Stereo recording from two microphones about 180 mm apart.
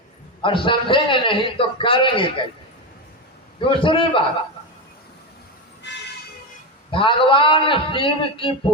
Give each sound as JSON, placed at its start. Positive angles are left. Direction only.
{"t": 0.4, "sound": "a man's voice", "side_deg": 30}
{"t": 3.7, "sound": "a man's voice", "side_deg": 30}
{"t": 6.9, "sound": "a man's voice", "side_deg": 30}